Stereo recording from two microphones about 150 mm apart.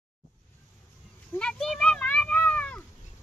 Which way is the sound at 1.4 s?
5° left (ahead or behind).